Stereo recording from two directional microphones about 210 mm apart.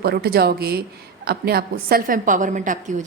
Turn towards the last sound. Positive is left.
turn(degrees=-35)  # may be behind; listen again after turning